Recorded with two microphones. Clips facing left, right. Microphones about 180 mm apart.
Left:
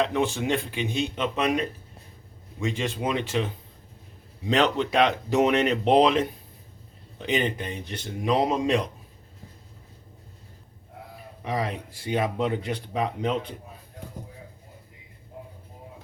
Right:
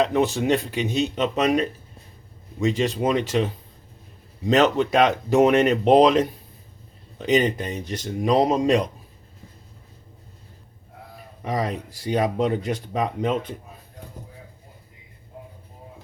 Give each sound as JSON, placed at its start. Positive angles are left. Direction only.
{"t": 0.0, "sound": "speech", "side_deg": -40}
{"t": 4.4, "sound": "speech", "side_deg": -45}
{"t": 11.4, "sound": "speech", "side_deg": -40}